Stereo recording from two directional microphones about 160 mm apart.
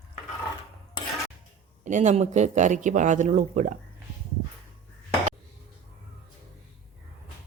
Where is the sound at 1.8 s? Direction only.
50° right (ahead or behind).